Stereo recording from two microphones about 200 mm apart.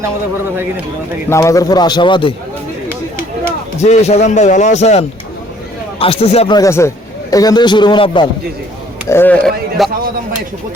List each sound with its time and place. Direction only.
1.3 s a man's voice: 15° left (ahead or behind)
3.8 s a man's voice: 35° left (ahead or behind)
6.6 s a man's voice: 15° left (ahead or behind)
9.0 s speech: 10° left (ahead or behind)